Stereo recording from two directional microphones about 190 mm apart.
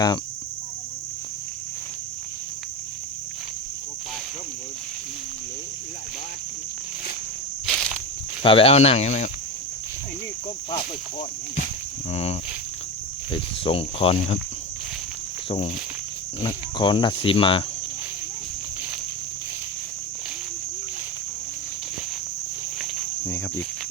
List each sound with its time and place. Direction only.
7.7 s walk: centre (ahead or behind)
8.4 s speech: 30° left (ahead or behind)
12.1 s speech: 35° left (ahead or behind)
15.4 s insect: 35° left (ahead or behind)
16.4 s speech: 25° left (ahead or behind)